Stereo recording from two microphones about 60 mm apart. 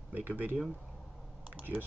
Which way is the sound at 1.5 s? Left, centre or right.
Right.